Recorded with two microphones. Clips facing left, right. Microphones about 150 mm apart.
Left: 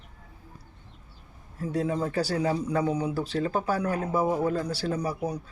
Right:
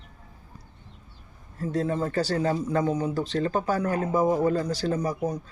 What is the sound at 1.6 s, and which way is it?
Speech, 10° left (ahead or behind).